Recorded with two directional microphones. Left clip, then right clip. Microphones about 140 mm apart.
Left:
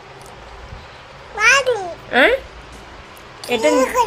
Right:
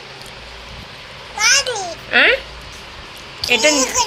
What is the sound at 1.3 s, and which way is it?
Babbling, 50° left (ahead or behind).